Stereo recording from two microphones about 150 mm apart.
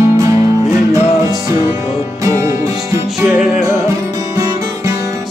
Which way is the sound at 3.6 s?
20° right (ahead or behind).